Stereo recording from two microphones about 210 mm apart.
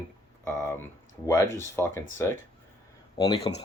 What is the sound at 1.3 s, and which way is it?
Speech, 15° left (ahead or behind).